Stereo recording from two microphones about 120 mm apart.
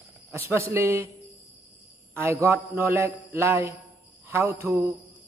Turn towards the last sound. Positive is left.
turn(degrees=-25)  # may be behind; listen again after turning